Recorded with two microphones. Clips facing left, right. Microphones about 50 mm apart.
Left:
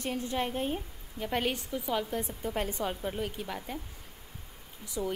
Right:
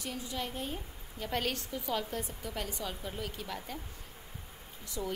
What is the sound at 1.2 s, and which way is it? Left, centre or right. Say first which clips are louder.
A woman's voice: left 3 dB; centre.